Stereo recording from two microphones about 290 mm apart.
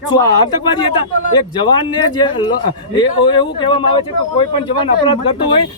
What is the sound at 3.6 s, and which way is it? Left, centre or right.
Speech, centre.